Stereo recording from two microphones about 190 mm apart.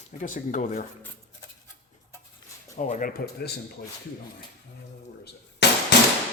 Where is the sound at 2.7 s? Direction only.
40° left (ahead or behind); by 3.6 s 55° left (ahead or behind).